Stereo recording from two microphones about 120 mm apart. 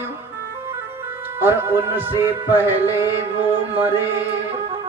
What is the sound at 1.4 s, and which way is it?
Speech, 20° right (ahead or behind).